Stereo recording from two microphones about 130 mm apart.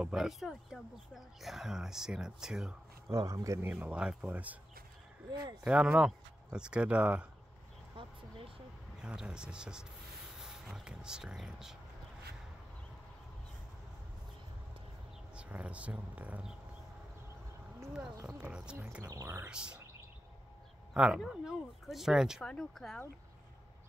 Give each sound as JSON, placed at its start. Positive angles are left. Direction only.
{"t": 0.0, "sound": "speech", "side_deg": -5}
{"t": 3.1, "sound": "a man's voice", "side_deg": -25}
{"t": 3.7, "sound": "speech", "side_deg": -10}
{"t": 5.6, "sound": "speech", "side_deg": -5}
{"t": 7.9, "sound": "a sound", "side_deg": -40}
{"t": 9.0, "sound": "speech", "side_deg": -5}
{"t": 15.3, "sound": "speech", "side_deg": -10}
{"t": 18.2, "sound": "speech", "side_deg": -10}
{"t": 19.0, "sound": "a man's voice", "side_deg": -20}
{"t": 19.5, "sound": "speech", "side_deg": -5}
{"t": 20.9, "sound": "speech", "side_deg": -5}